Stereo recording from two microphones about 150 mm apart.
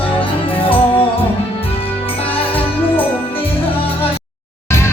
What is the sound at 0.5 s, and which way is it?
Music, 35° left (ahead or behind).